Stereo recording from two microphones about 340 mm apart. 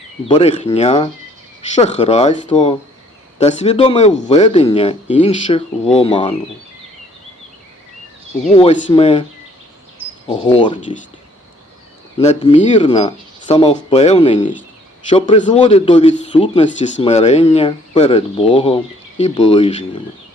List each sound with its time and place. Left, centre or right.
0.3 s speech: centre
8.5 s speech: centre
10.2 s speech: centre
12.2 s speech: centre